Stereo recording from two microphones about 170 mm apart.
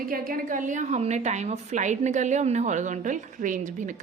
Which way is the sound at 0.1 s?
55° right (ahead or behind).